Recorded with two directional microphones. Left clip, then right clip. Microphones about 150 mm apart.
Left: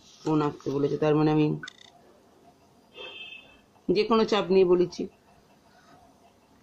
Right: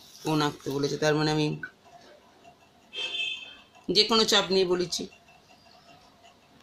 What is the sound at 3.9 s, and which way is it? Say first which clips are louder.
Speech: right 1 dB; 25° left (ahead or behind).